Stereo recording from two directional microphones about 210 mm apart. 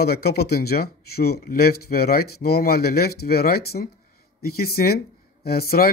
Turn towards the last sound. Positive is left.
turn(degrees=45)  # may be behind; listen again after turning